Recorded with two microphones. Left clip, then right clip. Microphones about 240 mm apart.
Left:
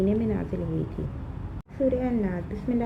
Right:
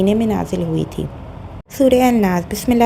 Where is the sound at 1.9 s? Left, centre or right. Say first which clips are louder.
Right 15 dB; right.